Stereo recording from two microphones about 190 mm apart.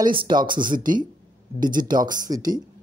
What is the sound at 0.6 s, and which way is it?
Speech, 45° right (ahead or behind).